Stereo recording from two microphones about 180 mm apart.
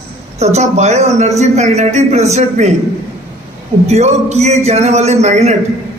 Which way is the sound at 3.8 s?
35° right (ahead or behind).